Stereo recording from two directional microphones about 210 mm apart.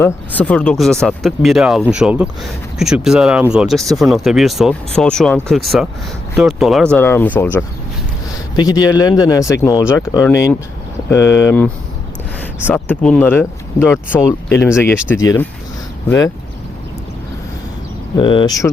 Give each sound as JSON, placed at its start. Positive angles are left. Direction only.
{"t": 0.3, "sound": "speech", "side_deg": 5}
{"t": 6.9, "sound": "speech", "side_deg": 10}
{"t": 8.5, "sound": "speech", "side_deg": 20}
{"t": 18.2, "sound": "speech", "side_deg": 20}